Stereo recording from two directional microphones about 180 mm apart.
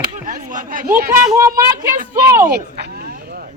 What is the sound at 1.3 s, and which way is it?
Speech, 15° right (ahead or behind).